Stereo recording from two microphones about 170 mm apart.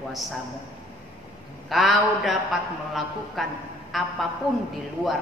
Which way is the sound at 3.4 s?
Centre (ahead or behind).